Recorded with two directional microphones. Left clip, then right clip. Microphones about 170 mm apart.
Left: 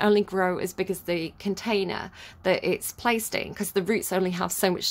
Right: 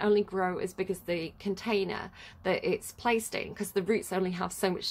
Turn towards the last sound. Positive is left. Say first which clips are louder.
# left 6 dB
turn(degrees=25)  # may be behind; listen again after turning